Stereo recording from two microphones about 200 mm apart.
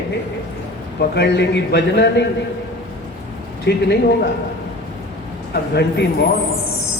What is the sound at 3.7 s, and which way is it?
Speech, 60° left (ahead or behind).